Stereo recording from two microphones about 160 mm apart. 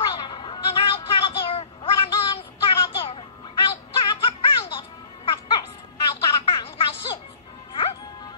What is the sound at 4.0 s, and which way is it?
Music, 30° left (ahead or behind).